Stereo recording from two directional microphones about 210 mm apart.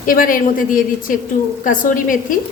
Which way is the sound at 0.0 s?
40° left (ahead or behind).